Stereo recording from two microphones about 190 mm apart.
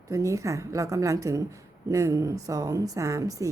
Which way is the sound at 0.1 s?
15° right (ahead or behind).